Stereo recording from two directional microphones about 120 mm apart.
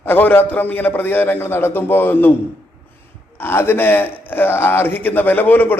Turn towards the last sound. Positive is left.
turn(degrees=15)  # may be behind; listen again after turning